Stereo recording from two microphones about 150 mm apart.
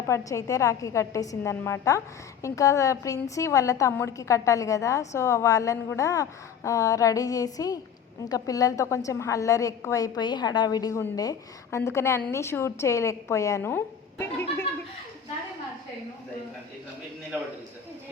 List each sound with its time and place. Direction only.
0.1 s a woman's voice: 20° left (ahead or behind)